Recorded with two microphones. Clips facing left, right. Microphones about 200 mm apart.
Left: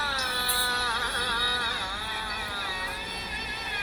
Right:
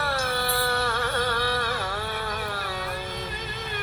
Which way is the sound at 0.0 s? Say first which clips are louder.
Right 8 dB; 55° right (ahead or behind).